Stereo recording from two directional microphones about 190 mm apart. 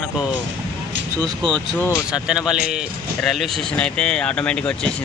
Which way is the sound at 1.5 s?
5° left (ahead or behind).